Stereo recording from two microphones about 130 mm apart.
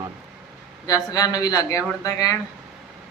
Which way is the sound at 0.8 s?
30° left (ahead or behind).